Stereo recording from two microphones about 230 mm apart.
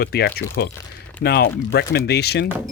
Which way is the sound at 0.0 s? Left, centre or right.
Left.